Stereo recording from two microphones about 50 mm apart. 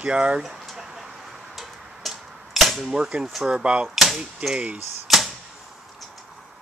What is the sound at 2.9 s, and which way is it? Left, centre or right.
Speech, centre.